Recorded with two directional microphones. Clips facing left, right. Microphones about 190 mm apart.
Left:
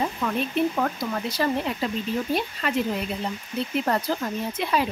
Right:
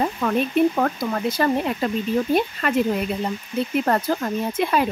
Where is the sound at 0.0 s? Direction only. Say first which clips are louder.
Right 5 dB; 55° right (ahead or behind).